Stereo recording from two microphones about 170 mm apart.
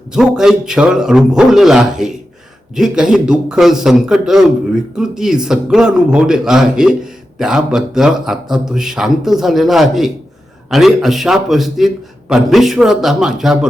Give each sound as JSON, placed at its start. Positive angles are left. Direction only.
{"t": 0.1, "sound": "a man's voice", "side_deg": -5}